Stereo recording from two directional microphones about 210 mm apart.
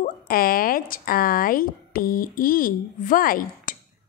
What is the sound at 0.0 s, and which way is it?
Speech, 45° left (ahead or behind).